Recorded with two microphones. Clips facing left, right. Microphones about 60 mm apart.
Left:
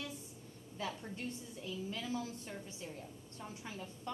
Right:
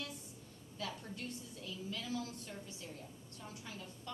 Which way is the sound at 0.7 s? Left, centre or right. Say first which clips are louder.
Left 2 dB; left.